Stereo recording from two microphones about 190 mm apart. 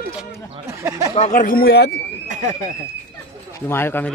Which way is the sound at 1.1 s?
40° left (ahead or behind).